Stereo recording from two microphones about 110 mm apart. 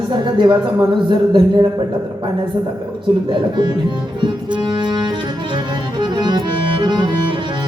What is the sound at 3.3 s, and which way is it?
Speech, 45° right (ahead or behind).